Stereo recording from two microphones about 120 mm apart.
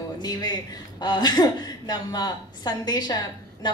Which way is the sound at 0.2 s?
35° left (ahead or behind).